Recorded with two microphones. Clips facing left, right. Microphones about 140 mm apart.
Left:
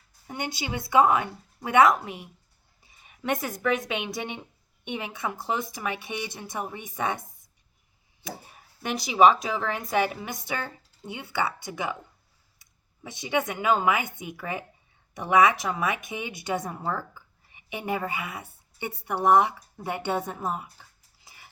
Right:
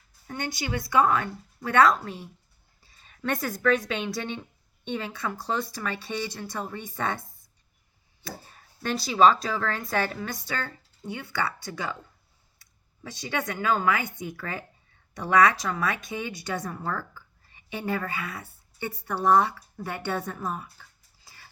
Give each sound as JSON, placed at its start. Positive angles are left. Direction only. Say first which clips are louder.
{"t": 0.3, "sound": "a woman's voice", "louder": "right 1 dB", "side_deg": 20}
{"t": 21.2, "sound": "dog", "louder": "left 1 dB", "side_deg": 20}